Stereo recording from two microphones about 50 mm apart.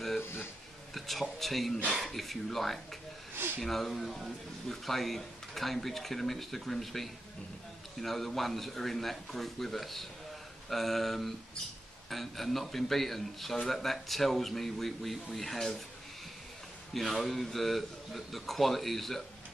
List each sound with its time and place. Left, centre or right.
0.2 s a sound: left
0.9 s speech: centre
16.9 s speech: centre